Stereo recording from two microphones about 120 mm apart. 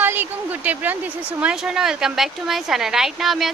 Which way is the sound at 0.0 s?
15° right (ahead or behind).